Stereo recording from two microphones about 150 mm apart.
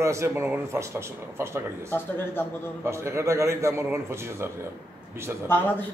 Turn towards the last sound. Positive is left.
turn(degrees=15)  # may be behind; listen again after turning